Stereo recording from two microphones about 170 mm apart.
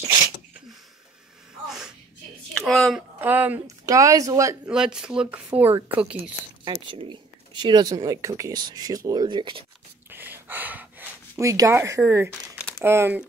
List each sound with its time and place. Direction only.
2.6 s speech: centre (ahead or behind)
3.2 s speech: 10° right (ahead or behind)
4.6 s a woman's voice: 5° right (ahead or behind)
6.6 s speech: 30° right (ahead or behind)
10.0 s a sound: 10° right (ahead or behind)
12.7 s speech: 15° right (ahead or behind)